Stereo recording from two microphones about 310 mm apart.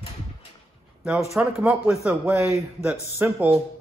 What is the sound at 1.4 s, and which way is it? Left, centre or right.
A man's voice, centre.